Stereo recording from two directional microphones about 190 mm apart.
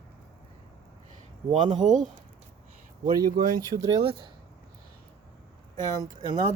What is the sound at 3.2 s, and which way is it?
Speech, 50° right (ahead or behind).